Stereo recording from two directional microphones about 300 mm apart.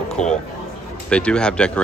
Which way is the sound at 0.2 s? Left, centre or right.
Left.